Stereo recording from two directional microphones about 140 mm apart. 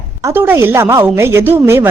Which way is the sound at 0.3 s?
15° right (ahead or behind).